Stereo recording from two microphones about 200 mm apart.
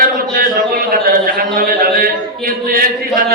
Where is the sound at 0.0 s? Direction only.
45° right (ahead or behind).